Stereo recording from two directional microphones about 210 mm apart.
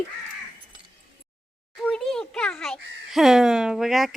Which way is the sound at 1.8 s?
Centre (ahead or behind).